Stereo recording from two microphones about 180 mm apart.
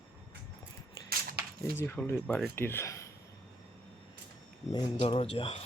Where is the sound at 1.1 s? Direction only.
55° right (ahead or behind).